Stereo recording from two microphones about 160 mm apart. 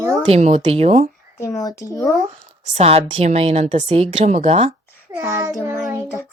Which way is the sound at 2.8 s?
40° right (ahead or behind).